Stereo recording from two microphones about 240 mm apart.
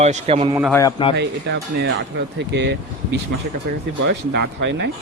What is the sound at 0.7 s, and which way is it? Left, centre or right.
Speech, centre.